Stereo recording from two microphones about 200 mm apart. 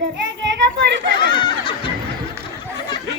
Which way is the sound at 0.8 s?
60° right (ahead or behind).